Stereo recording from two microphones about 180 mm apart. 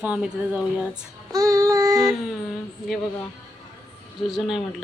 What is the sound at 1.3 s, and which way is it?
Child singing, 20° right (ahead or behind).